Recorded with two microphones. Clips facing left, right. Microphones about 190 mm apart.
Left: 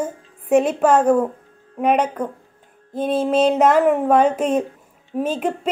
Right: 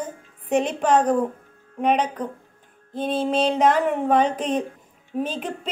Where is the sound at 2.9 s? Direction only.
50° left (ahead or behind).